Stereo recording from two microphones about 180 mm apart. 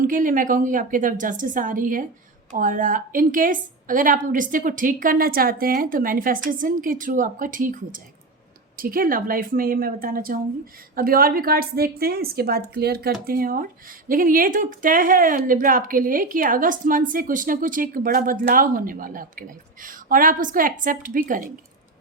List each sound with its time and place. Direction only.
0.0 s a woman's voice: 50° right (ahead or behind)